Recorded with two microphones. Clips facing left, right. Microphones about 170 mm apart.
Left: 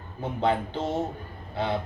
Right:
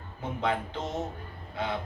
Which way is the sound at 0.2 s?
30° left (ahead or behind).